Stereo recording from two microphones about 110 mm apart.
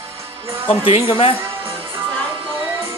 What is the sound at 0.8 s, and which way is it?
Speech, 55° left (ahead or behind).